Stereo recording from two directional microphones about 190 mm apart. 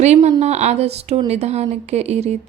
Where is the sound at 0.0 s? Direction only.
35° right (ahead or behind).